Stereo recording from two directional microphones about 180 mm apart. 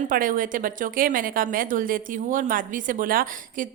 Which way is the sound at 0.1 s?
50° right (ahead or behind).